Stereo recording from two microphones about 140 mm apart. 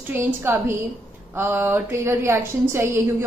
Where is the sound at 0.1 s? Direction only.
15° right (ahead or behind).